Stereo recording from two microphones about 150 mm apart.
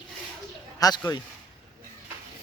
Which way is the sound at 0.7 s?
25° left (ahead or behind).